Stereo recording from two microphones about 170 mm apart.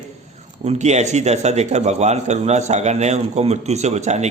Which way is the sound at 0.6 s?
40° right (ahead or behind).